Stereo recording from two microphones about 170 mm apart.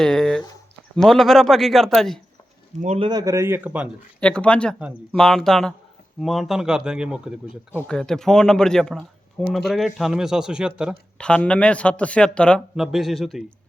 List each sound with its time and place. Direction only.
0.0 s speech: 5° left (ahead or behind)
2.8 s speech: 40° right (ahead or behind)
3.1 s a man's voice: 20° right (ahead or behind)
4.2 s speech: 5° left (ahead or behind)